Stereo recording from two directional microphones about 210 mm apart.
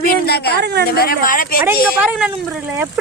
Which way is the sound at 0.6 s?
50° right (ahead or behind).